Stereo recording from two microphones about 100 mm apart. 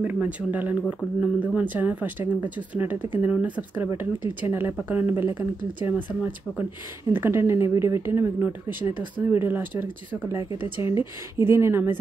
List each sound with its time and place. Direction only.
0.0 s speech: 15° right (ahead or behind)